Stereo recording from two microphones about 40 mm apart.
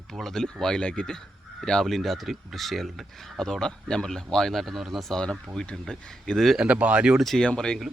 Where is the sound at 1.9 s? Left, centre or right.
Centre.